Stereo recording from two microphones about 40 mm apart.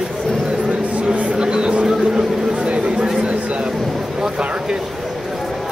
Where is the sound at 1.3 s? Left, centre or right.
Right.